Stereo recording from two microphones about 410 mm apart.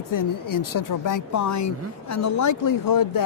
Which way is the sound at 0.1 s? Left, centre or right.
Left.